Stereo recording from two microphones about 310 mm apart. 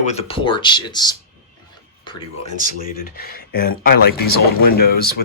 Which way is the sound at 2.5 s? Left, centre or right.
Left.